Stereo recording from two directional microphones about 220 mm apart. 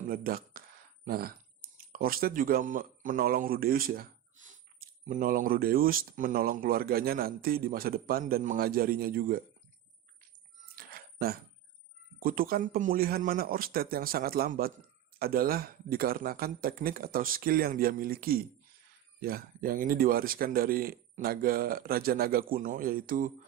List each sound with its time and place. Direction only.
0.1 s a man's voice: 40° right (ahead or behind)
10.8 s a sound: 40° right (ahead or behind)
12.2 s a man's voice: 40° right (ahead or behind)